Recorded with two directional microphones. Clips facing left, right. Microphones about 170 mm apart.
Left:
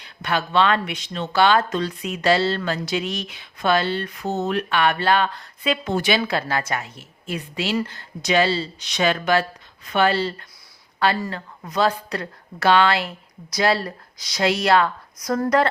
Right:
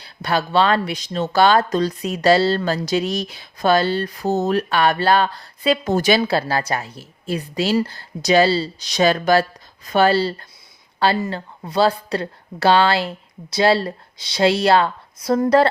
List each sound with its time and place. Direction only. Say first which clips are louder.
0.0 s speech: right 3 dB; 35° right (ahead or behind)